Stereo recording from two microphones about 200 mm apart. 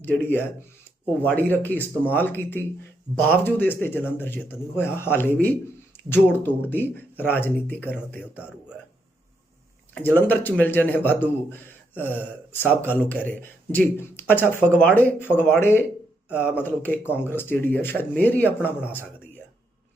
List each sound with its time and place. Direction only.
0.0 s speech: 10° left (ahead or behind)
8.2 s a man's voice: 5° right (ahead or behind)
10.2 s speech: 10° left (ahead or behind)